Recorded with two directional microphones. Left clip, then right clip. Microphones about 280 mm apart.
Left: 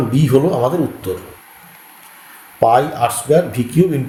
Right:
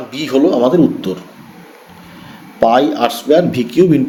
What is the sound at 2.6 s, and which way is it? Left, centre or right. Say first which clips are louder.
Speech: right 2 dB; right.